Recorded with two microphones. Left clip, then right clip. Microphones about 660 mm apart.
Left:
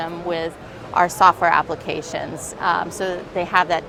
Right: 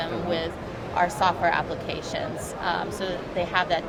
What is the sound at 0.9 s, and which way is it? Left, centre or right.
A woman's voice, left.